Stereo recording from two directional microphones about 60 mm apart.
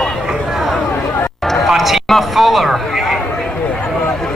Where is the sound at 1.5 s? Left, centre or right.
Centre.